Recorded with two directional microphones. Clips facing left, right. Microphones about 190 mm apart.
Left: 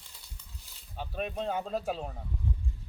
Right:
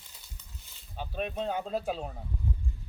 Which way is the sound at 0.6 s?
Centre (ahead or behind).